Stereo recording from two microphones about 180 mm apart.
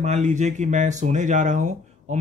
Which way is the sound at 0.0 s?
40° right (ahead or behind).